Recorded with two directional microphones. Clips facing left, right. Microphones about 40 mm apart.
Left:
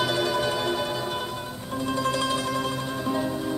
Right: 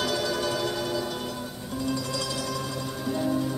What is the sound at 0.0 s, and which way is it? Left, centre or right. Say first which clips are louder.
Music: left 3 dB; left.